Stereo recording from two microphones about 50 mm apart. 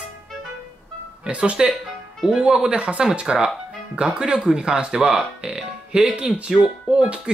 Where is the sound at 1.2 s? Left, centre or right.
Right.